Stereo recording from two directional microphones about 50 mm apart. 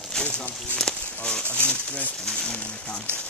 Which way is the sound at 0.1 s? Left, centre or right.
Centre.